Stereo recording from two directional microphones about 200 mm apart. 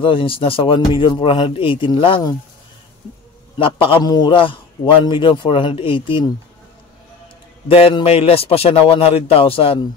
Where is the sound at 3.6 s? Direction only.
25° left (ahead or behind).